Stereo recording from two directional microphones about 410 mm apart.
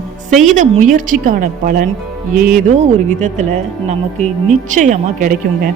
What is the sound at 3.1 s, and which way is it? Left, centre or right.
Music, centre.